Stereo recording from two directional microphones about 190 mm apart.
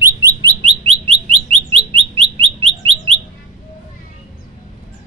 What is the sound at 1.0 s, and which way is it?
Bird, 30° right (ahead or behind).